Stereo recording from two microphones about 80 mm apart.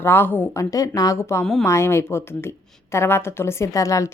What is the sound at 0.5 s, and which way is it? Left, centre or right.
A woman's voice, left.